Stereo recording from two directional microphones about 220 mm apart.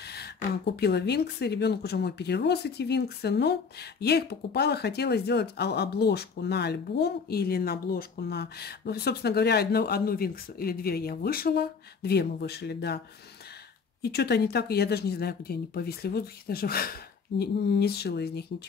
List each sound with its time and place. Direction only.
0.0 s speech: 45° left (ahead or behind)
14.0 s speech: 45° left (ahead or behind)